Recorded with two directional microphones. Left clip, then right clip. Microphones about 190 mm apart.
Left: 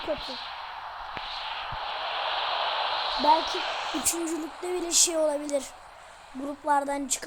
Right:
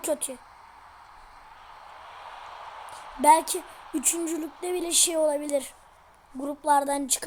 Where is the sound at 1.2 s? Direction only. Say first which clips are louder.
Left 15 dB; 45° left (ahead or behind).